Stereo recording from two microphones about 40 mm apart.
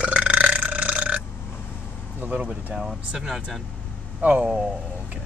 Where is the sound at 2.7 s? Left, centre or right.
Centre.